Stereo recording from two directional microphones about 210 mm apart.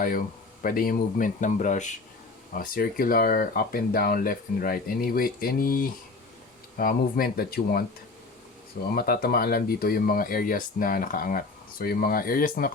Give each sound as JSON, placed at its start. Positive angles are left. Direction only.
{"t": 0.0, "sound": "speech", "side_deg": 40}
{"t": 9.0, "sound": "speech", "side_deg": 45}